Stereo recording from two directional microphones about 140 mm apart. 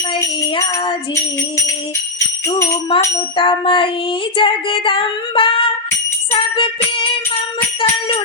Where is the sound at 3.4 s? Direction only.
35° left (ahead or behind).